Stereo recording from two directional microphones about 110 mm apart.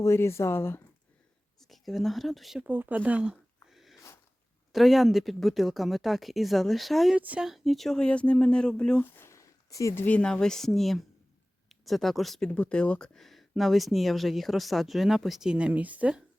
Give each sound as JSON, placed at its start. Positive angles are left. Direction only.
{"t": 0.0, "sound": "speech", "side_deg": 25}
{"t": 1.6, "sound": "speech", "side_deg": 0}
{"t": 2.6, "sound": "speech", "side_deg": -15}
{"t": 7.2, "sound": "speech", "side_deg": -15}
{"t": 7.4, "sound": "speech", "side_deg": 0}
{"t": 9.1, "sound": "speech", "side_deg": 25}